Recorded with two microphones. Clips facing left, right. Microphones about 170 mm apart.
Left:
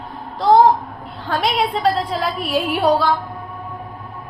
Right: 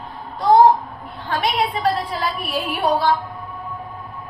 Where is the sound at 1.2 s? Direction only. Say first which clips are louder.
Left 2 dB; 80° left.